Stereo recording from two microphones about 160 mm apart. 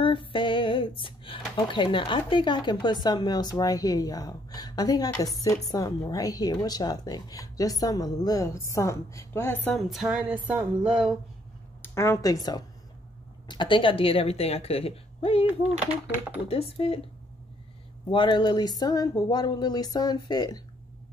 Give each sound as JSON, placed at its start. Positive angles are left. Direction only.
{"t": 0.0, "sound": "speech", "side_deg": 30}
{"t": 9.7, "sound": "a sound", "side_deg": 0}
{"t": 11.8, "sound": "a woman's voice", "side_deg": 15}
{"t": 16.7, "sound": "a woman's voice", "side_deg": 40}
{"t": 18.1, "sound": "speech", "side_deg": 30}